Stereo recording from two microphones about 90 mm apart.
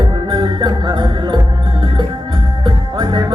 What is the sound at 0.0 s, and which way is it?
Music, 55° right (ahead or behind).